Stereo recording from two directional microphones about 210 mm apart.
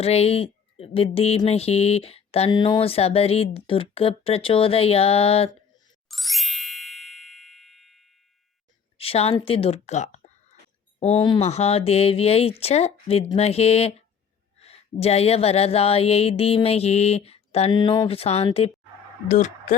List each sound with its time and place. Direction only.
0.0 s speech: 30° left (ahead or behind)
6.1 s ding: centre (ahead or behind)
9.0 s a woman's voice: 30° left (ahead or behind)